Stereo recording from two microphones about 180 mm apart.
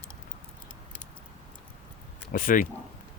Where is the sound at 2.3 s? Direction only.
50° left (ahead or behind).